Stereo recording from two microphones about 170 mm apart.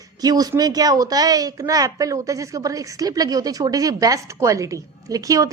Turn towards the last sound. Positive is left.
turn(degrees=-20)  # may be behind; listen again after turning